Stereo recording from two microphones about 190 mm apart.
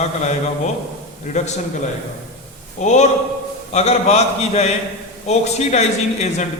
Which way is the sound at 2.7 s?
40° left (ahead or behind).